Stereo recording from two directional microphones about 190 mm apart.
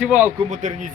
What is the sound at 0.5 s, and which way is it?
Speech, 40° right (ahead or behind).